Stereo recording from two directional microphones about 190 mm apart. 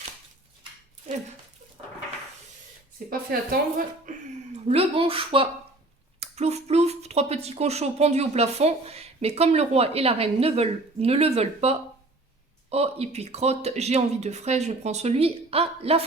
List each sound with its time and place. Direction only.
3.1 s speech: 50° right (ahead or behind)
4.7 s speech: 30° right (ahead or behind)